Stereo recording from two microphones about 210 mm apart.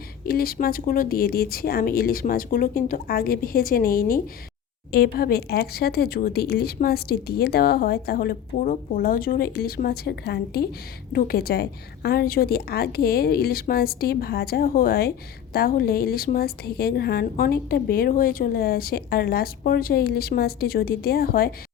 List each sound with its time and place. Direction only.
0.3 s a woman's voice: 45° left (ahead or behind)